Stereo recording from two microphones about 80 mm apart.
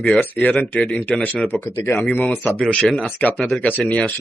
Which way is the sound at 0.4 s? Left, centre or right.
Centre.